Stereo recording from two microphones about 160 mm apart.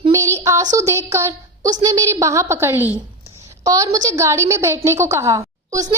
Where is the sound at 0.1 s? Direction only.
20° right (ahead or behind).